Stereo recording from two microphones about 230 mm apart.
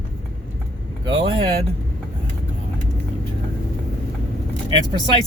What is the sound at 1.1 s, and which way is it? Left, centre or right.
Speech, right.